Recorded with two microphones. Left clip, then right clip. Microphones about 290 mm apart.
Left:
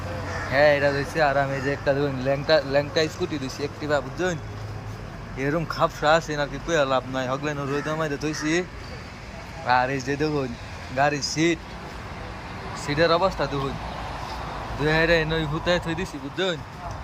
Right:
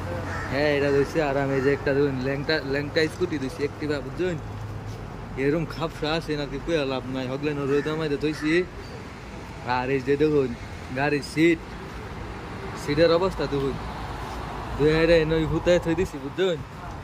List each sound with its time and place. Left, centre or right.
0.5 s speech: centre
5.4 s speech: centre
9.6 s speech: centre
12.8 s speech: centre
14.8 s speech: centre